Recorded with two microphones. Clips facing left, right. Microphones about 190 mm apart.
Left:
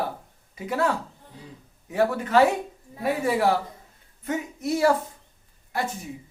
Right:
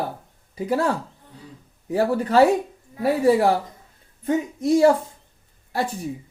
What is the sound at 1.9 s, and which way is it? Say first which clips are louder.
Speech: right 3 dB; 35° right (ahead or behind).